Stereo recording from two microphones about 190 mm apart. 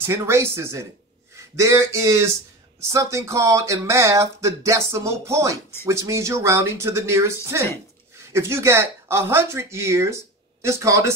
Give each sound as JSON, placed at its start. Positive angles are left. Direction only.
{"t": 0.0, "sound": "speech", "side_deg": -15}